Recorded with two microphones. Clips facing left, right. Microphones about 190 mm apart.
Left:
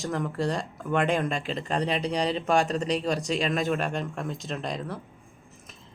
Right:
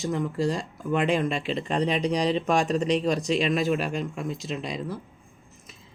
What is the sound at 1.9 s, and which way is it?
Speech, 30° left (ahead or behind).